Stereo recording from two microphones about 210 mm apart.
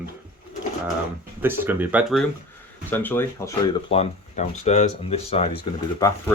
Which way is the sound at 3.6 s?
25° left (ahead or behind).